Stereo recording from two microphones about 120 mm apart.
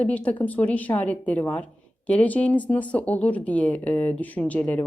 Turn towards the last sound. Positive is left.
turn(degrees=10)  # may be behind; listen again after turning